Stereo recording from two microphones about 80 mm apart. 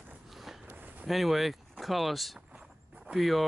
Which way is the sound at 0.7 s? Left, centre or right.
Right.